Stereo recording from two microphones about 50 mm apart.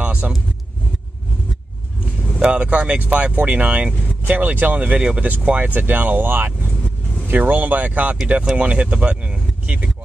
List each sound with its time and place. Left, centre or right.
0.0 s vehicle: right
2.4 s speech: right